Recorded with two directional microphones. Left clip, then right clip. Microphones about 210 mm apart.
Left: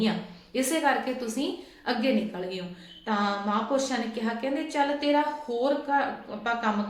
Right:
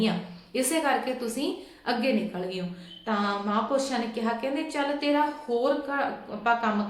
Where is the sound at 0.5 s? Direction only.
5° right (ahead or behind).